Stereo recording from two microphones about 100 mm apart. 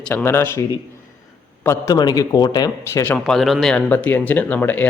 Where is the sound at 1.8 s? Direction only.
40° left (ahead or behind).